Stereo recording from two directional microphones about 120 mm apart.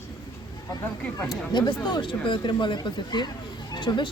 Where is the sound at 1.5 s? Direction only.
40° left (ahead or behind).